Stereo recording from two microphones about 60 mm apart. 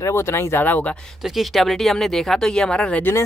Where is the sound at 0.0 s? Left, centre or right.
Left.